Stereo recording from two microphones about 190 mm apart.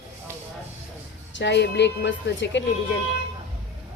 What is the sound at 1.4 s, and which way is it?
Speech, 65° left (ahead or behind).